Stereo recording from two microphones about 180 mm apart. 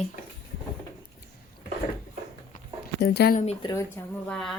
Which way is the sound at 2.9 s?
65° left (ahead or behind).